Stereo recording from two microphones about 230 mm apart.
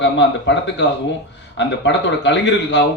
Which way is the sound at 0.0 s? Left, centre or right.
Left.